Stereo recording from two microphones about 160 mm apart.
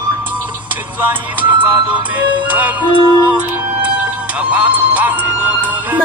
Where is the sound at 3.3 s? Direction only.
5° right (ahead or behind).